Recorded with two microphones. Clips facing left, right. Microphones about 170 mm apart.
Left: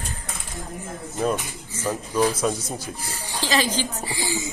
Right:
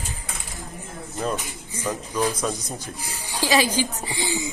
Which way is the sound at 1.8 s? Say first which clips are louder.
Left 3 dB; 10° left (ahead or behind).